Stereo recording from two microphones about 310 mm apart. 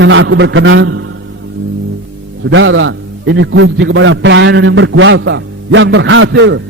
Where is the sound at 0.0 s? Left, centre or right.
Right.